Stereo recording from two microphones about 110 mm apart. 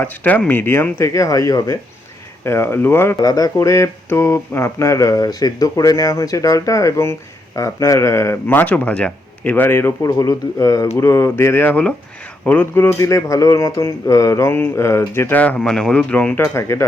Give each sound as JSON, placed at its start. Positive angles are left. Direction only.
{"t": 0.0, "sound": "speech", "side_deg": 15}
{"t": 3.2, "sound": "speech", "side_deg": 35}
{"t": 16.4, "sound": "speech", "side_deg": 25}